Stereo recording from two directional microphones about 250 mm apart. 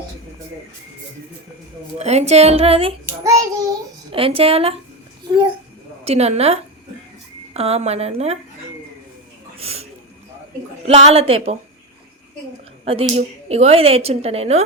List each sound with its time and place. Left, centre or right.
2.0 s speech: right
6.1 s speech: right
9.6 s speech: right
10.8 s speech: right
12.8 s speech: right